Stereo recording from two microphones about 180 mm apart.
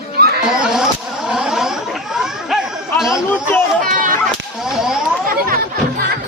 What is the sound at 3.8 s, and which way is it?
Speech, 45° right (ahead or behind).